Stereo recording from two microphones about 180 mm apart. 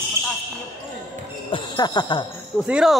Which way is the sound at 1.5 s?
25° left (ahead or behind).